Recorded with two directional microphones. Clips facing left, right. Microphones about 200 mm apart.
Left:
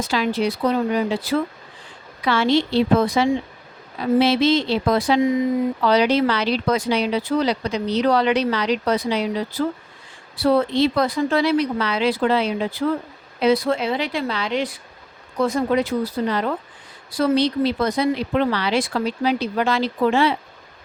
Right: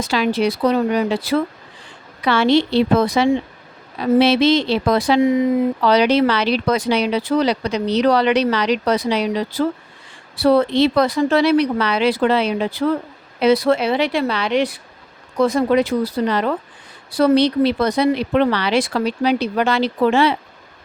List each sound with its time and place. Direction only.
0.0 s speech: 75° right (ahead or behind)
10.4 s speech: 75° right (ahead or behind)
15.4 s speech: 90° right